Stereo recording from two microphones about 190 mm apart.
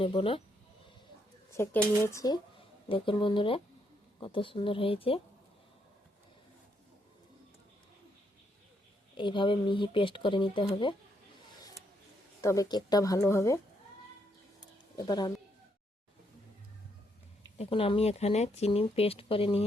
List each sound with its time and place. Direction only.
0.0 s speech: 30° left (ahead or behind)
1.5 s speech: 15° left (ahead or behind)
9.1 s speech: 25° left (ahead or behind)
12.4 s speech: 15° left (ahead or behind)
14.9 s speech: 20° left (ahead or behind)
17.6 s speech: 30° left (ahead or behind)